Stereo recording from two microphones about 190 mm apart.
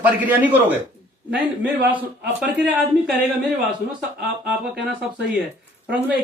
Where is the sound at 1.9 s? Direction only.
10° right (ahead or behind).